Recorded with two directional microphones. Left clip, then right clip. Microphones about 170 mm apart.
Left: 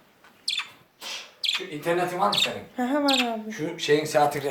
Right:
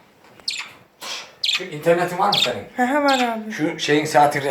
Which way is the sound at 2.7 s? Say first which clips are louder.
Right 7 dB; 25° left (ahead or behind).